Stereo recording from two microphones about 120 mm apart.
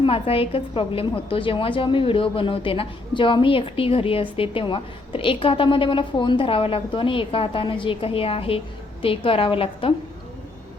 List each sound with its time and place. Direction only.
0.0 s speech: 50° left (ahead or behind)